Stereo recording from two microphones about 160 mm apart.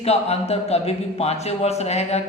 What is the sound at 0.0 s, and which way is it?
A man's voice, 40° left (ahead or behind).